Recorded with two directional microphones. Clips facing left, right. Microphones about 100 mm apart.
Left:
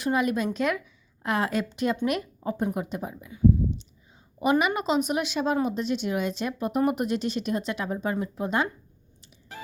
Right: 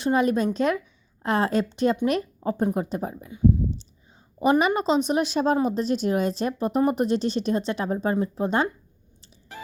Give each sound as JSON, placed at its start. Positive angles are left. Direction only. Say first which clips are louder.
{"t": 0.0, "sound": "a woman's voice", "louder": "right 4 dB", "side_deg": -35}
{"t": 4.6, "sound": "speech", "louder": "right 3 dB", "side_deg": -35}